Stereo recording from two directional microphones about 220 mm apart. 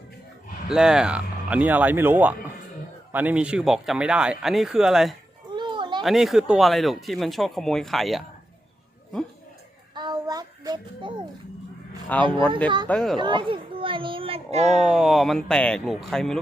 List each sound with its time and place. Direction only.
0.7 s speech: 5° right (ahead or behind)
5.5 s a sound: 20° right (ahead or behind)
6.0 s speech: centre (ahead or behind)
9.9 s child singing: 20° right (ahead or behind)
12.1 s speech: 5° left (ahead or behind)
12.6 s speech: 20° right (ahead or behind)
12.9 s speech: centre (ahead or behind)
13.1 s a child's voice: 20° right (ahead or behind)
14.8 s speech: centre (ahead or behind)